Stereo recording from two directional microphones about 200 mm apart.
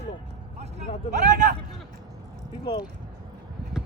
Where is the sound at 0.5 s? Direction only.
35° right (ahead or behind).